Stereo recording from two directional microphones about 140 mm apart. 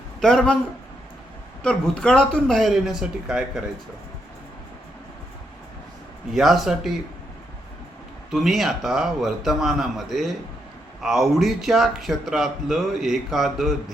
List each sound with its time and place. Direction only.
0.2 s a man's voice: 5° left (ahead or behind)
1.6 s a man's voice: 5° left (ahead or behind)
6.3 s a man's voice: centre (ahead or behind)
8.3 s a man's voice: centre (ahead or behind)